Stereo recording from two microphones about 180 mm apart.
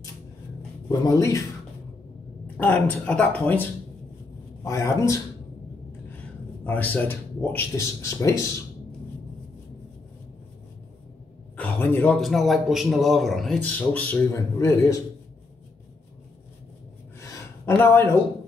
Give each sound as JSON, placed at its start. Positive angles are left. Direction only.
{"t": 0.8, "sound": "speech", "side_deg": 15}
{"t": 2.4, "sound": "speech", "side_deg": 5}
{"t": 4.6, "sound": "speech", "side_deg": 15}
{"t": 6.6, "sound": "speech", "side_deg": 10}
{"t": 11.5, "sound": "a man's voice", "side_deg": 10}
{"t": 17.2, "sound": "a sound", "side_deg": 15}